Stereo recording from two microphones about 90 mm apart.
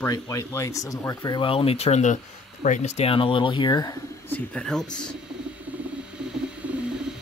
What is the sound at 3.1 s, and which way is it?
Speech, 75° left (ahead or behind).